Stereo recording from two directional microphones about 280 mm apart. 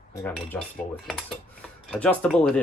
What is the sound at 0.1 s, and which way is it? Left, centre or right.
Speech, centre.